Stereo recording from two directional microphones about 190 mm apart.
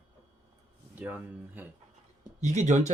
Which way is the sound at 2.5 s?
40° right (ahead or behind).